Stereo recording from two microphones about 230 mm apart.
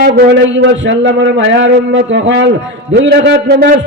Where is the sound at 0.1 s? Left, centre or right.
Right.